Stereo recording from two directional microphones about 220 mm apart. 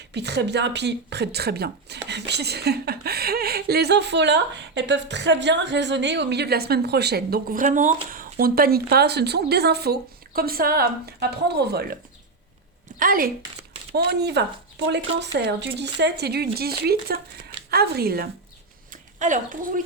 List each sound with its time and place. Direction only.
0.1 s speech: 50° right (ahead or behind)
13.0 s speech: 40° right (ahead or behind)
18.9 s a sound: 35° right (ahead or behind)